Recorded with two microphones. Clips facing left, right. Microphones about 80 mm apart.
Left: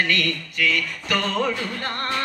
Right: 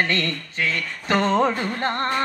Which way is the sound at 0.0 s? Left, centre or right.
Right.